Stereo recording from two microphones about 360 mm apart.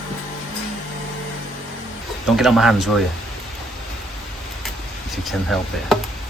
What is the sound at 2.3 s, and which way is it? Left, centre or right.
Speech, centre.